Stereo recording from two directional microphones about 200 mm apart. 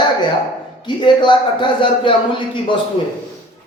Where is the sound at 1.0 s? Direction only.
25° left (ahead or behind).